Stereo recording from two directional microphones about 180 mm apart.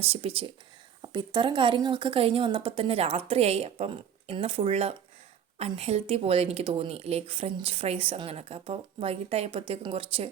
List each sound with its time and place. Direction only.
0.0 s speech: 30° right (ahead or behind)